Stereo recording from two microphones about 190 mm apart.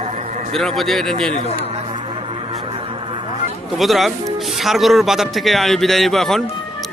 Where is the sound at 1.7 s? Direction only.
30° right (ahead or behind).